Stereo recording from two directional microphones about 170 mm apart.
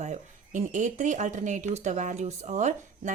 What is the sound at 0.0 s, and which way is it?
Speech, 45° right (ahead or behind).